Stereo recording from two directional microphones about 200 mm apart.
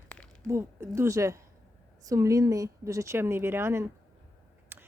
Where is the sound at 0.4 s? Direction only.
15° right (ahead or behind).